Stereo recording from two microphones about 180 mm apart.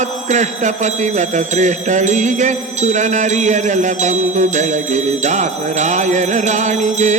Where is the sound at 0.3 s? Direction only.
40° right (ahead or behind).